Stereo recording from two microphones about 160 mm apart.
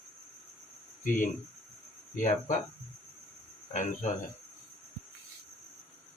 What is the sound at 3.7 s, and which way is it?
Speech, 50° left (ahead or behind).